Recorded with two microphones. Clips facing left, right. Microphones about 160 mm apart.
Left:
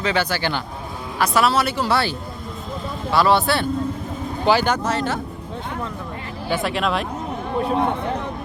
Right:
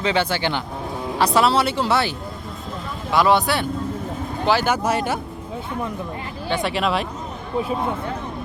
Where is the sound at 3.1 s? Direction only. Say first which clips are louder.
Even; 15° right (ahead or behind).